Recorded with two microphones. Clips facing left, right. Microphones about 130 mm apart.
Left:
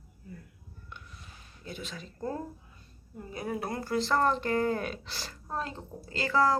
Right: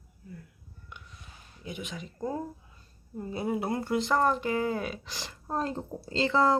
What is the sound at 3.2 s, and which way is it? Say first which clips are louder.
Speech: right 4 dB; 25° right (ahead or behind).